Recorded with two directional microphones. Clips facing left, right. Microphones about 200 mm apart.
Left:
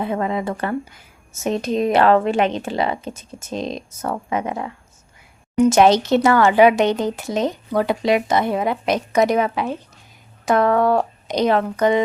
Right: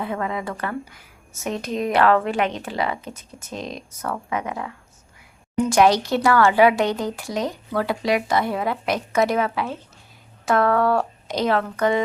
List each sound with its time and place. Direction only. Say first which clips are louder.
0.0 s speech: left 4 dB; 25° left (ahead or behind)